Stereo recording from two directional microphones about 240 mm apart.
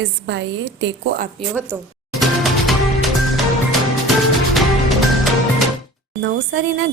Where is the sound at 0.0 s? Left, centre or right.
Right.